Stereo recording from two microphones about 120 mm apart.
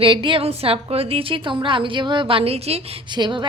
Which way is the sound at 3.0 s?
40° right (ahead or behind).